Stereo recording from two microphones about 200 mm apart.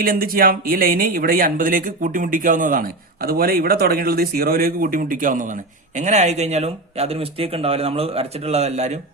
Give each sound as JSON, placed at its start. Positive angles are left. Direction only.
{"t": 0.0, "sound": "speech", "side_deg": -45}